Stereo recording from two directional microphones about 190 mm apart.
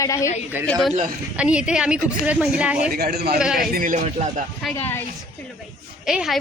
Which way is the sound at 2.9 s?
55° right (ahead or behind).